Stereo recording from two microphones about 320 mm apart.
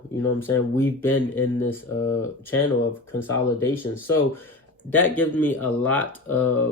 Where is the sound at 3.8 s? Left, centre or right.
Centre.